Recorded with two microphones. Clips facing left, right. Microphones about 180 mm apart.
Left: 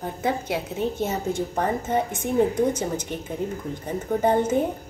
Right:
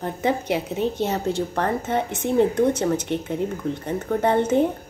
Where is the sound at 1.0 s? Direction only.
65° right (ahead or behind).